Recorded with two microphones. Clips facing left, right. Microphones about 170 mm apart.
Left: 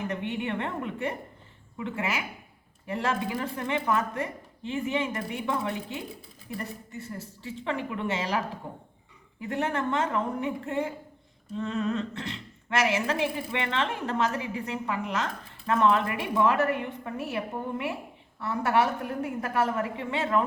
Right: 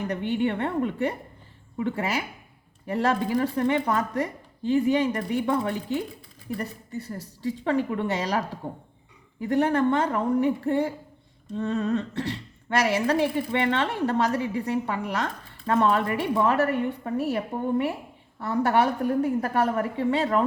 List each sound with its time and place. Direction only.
0.1 s speech: 35° right (ahead or behind)
9.4 s speech: 35° right (ahead or behind)